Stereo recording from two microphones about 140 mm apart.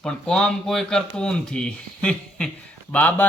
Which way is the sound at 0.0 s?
5° left (ahead or behind).